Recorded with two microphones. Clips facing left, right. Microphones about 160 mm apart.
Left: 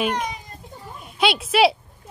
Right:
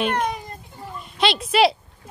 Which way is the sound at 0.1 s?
55° right (ahead or behind).